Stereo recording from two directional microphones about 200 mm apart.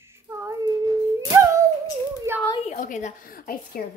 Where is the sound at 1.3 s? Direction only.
15° right (ahead or behind).